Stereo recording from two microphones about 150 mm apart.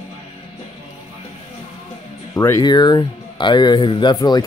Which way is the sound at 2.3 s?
20° left (ahead or behind).